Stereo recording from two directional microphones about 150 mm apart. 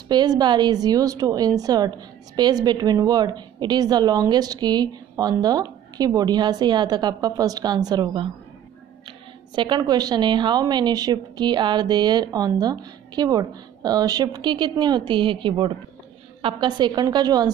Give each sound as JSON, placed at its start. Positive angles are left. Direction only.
{"t": 0.1, "sound": "a woman's voice", "side_deg": -30}
{"t": 9.6, "sound": "a woman's voice", "side_deg": -30}